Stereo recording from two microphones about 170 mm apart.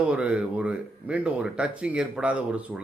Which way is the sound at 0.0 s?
5° right (ahead or behind).